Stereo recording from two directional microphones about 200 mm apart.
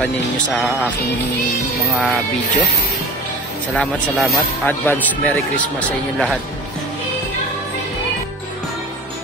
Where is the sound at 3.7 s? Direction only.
5° left (ahead or behind).